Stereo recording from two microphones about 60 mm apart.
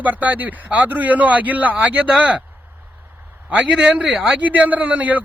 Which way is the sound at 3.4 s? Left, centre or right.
Right.